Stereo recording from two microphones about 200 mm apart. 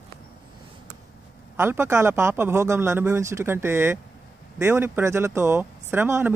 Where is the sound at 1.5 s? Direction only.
10° right (ahead or behind).